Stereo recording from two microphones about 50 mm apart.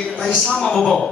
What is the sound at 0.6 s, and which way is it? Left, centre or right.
Speech, centre.